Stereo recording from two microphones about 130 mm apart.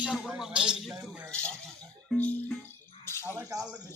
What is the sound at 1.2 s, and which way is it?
A man's voice, 10° left (ahead or behind).